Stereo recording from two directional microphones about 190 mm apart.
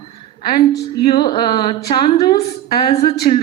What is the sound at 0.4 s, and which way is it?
A woman's voice, 25° left (ahead or behind).